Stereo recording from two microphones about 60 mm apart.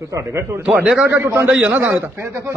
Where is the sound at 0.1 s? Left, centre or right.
Right.